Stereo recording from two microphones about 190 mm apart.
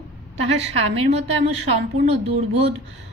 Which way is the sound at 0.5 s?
30° right (ahead or behind).